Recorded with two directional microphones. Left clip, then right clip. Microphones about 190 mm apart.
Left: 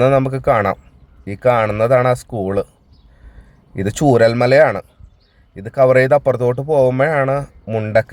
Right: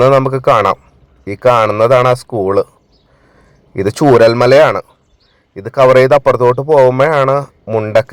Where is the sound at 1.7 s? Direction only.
10° left (ahead or behind).